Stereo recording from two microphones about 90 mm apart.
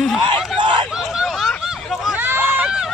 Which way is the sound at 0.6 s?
65° right (ahead or behind).